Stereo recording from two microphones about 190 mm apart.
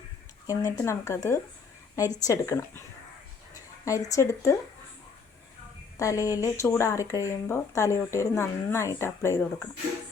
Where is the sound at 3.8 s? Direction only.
15° left (ahead or behind).